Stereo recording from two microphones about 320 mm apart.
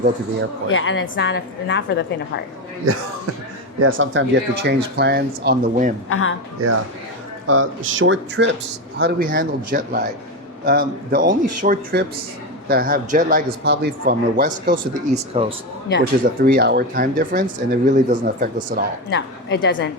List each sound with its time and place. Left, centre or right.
0.7 s a woman's voice: left
3.8 s speech: right
6.1 s a woman's voice: left
6.6 s speech: right
19.1 s a woman's voice: left